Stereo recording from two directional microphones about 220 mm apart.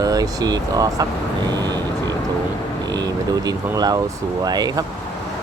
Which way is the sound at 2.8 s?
20° right (ahead or behind).